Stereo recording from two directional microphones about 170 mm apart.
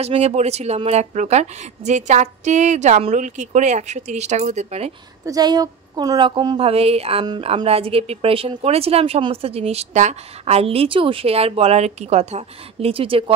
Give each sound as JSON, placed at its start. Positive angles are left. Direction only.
{"t": 0.0, "sound": "a woman's voice", "side_deg": -40}
{"t": 5.2, "sound": "a woman's voice", "side_deg": -20}